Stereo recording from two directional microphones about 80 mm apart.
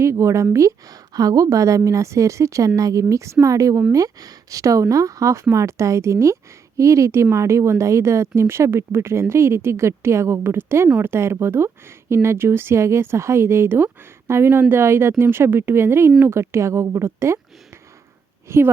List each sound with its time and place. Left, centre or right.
0.0 s speech: right
1.1 s speech: right
18.4 s speech: right